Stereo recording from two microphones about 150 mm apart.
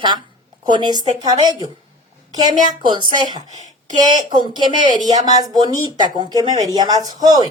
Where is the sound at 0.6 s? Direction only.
30° right (ahead or behind).